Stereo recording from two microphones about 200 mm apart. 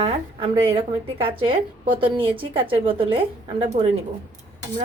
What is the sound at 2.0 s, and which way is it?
A woman's voice, 25° right (ahead or behind).